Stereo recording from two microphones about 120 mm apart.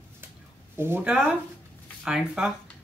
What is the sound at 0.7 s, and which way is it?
Speech, 20° right (ahead or behind).